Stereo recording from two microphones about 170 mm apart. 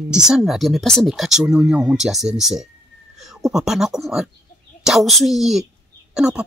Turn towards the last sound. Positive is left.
turn(degrees=-5)  # may be behind; listen again after turning